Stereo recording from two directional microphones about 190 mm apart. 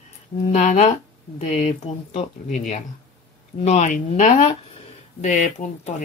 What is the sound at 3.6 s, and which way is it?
Speech, 40° left (ahead or behind).